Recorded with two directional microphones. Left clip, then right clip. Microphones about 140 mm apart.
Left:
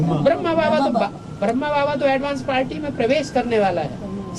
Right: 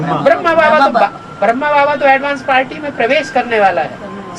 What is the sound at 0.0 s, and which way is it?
Speech, 35° right (ahead or behind).